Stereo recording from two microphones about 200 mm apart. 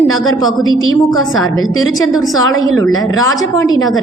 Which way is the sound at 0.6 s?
85° left.